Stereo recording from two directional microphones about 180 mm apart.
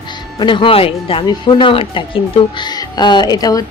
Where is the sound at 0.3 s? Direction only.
25° left (ahead or behind).